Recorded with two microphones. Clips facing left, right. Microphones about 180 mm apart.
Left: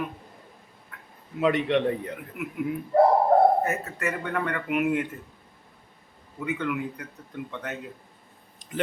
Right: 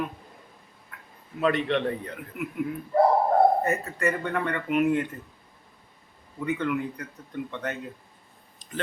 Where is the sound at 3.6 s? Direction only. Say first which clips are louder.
Right 1 dB; 5° left (ahead or behind).